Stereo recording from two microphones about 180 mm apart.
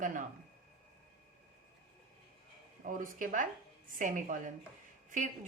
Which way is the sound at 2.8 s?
45° right (ahead or behind).